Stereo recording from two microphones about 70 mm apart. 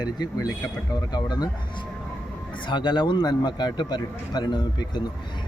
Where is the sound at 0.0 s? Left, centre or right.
Left.